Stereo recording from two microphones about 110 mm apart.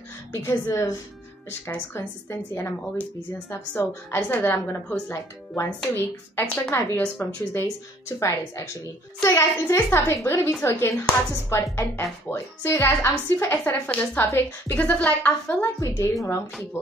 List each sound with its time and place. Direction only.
0.3 s speech: 30° left (ahead or behind)
2.0 s speech: 25° left (ahead or behind)